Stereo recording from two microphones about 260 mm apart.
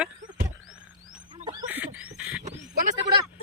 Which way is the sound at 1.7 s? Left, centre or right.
Centre.